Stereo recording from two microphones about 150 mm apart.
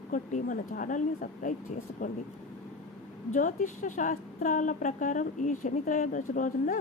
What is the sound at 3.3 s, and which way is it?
A woman's voice, 60° left (ahead or behind).